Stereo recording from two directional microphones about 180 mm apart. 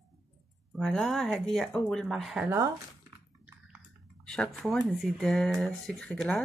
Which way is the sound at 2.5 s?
20° right (ahead or behind).